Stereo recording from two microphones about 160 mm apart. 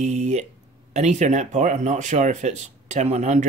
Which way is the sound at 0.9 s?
45° right (ahead or behind).